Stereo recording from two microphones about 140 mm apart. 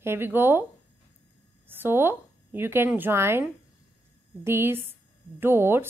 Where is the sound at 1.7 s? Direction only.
15° right (ahead or behind).